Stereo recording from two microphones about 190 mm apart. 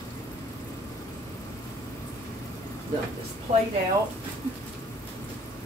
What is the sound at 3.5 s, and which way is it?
Speech, 30° right (ahead or behind).